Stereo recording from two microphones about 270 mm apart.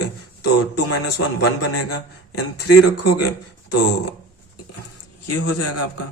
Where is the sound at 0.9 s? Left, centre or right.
Left.